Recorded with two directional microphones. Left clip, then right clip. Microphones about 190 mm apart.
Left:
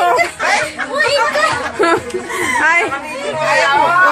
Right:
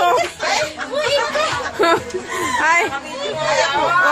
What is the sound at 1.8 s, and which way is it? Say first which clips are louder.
Chuckle: left 2 dB; centre (ahead or behind).